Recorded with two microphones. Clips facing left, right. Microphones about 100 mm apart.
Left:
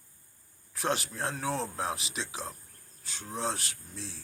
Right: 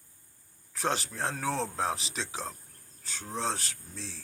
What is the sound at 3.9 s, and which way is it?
Speech, 10° left (ahead or behind).